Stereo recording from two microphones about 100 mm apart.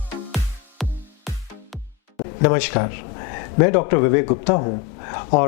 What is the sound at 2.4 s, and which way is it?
Speech, 15° left (ahead or behind).